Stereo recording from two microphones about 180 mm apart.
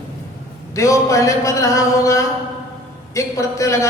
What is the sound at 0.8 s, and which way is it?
A man's voice, 15° left (ahead or behind).